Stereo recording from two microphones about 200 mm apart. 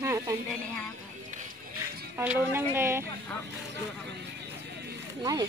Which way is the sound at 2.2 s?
10° right (ahead or behind).